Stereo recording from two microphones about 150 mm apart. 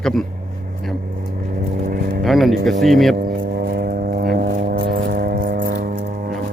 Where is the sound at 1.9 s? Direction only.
75° right (ahead or behind).